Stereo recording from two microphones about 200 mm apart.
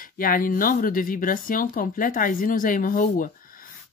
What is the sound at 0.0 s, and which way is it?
Speech, 45° left (ahead or behind).